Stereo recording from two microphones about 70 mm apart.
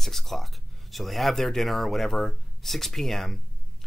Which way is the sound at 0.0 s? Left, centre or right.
Centre.